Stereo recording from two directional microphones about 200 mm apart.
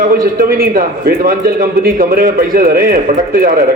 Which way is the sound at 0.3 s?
50° right (ahead or behind).